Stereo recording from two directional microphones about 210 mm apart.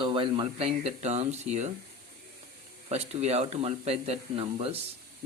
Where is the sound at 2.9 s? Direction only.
30° right (ahead or behind).